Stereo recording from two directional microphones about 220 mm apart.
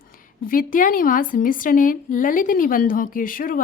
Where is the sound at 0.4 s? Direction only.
40° left (ahead or behind).